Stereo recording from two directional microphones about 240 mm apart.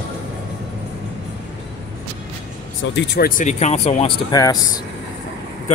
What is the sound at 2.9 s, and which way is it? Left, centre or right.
Speech, left.